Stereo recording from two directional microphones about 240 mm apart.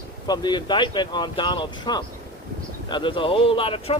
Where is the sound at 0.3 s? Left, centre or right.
Centre.